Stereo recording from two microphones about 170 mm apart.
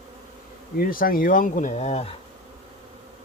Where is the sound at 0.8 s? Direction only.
55° left (ahead or behind); by 2.1 s 40° left (ahead or behind).